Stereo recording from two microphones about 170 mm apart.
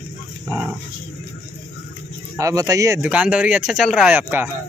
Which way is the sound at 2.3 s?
20° right (ahead or behind).